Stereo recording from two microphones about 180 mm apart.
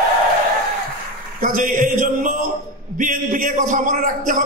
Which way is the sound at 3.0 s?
50° right (ahead or behind).